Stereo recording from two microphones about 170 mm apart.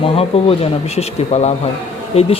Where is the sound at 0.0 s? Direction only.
35° left (ahead or behind).